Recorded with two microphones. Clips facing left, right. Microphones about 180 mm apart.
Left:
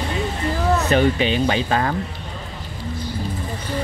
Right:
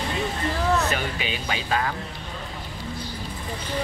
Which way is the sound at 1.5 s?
40° left (ahead or behind).